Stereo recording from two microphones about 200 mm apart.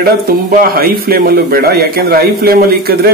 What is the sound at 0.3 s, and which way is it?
Speech, 45° right (ahead or behind).